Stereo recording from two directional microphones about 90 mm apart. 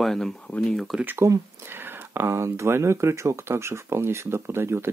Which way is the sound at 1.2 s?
35° right (ahead or behind).